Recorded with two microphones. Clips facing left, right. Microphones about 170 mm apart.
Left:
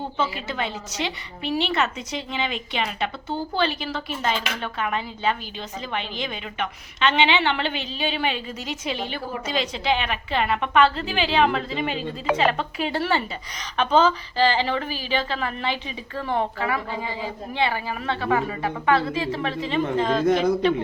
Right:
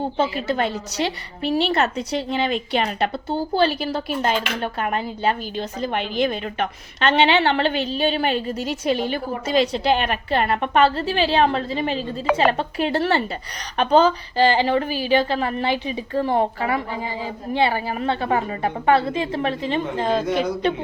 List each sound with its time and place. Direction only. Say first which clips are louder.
0.2 s a woman's voice: right 5 dB; 40° right (ahead or behind)